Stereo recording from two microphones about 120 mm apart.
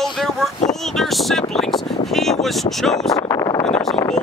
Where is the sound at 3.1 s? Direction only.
30° left (ahead or behind).